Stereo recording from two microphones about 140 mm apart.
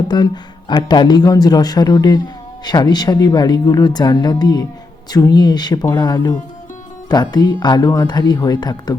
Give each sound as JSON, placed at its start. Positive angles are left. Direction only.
{"t": 0.1, "sound": "speech", "side_deg": 30}